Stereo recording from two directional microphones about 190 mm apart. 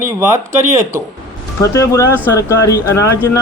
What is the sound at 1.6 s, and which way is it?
Speech, 15° left (ahead or behind).